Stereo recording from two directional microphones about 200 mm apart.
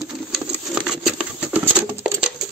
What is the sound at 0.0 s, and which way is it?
Patter, 5° right (ahead or behind).